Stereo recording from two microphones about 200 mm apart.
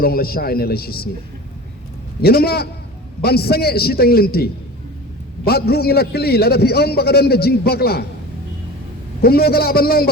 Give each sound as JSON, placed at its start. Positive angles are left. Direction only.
{"t": 0.0, "sound": "a man's voice", "side_deg": 50}
{"t": 2.2, "sound": "a man's voice", "side_deg": 50}
{"t": 5.5, "sound": "a man's voice", "side_deg": 50}
{"t": 9.2, "sound": "a man's voice", "side_deg": 50}